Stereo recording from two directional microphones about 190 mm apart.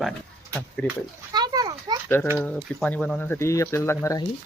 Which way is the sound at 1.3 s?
20° right (ahead or behind).